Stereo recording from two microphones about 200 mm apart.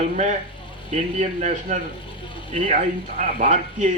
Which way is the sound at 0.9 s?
35° right (ahead or behind).